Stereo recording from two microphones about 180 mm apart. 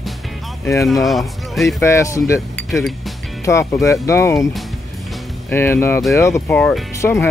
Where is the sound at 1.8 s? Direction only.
15° left (ahead or behind).